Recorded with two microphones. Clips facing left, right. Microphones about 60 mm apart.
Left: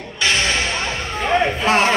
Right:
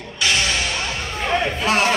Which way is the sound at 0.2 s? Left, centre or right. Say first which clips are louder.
Left 2 dB; left.